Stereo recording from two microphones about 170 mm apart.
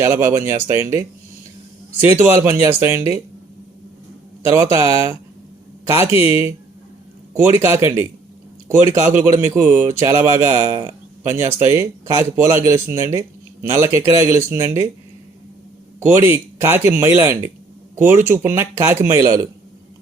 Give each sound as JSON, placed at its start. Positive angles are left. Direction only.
{"t": 0.0, "sound": "speech", "side_deg": -15}
{"t": 4.5, "sound": "speech", "side_deg": -15}
{"t": 16.0, "sound": "speech", "side_deg": -15}